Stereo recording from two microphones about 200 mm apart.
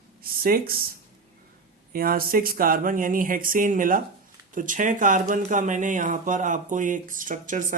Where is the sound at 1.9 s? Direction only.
45° right (ahead or behind).